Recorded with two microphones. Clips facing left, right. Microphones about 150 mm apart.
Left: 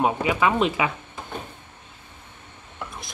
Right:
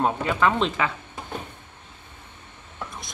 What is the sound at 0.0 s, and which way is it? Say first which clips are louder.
Speech: left 1 dB; 10° left (ahead or behind).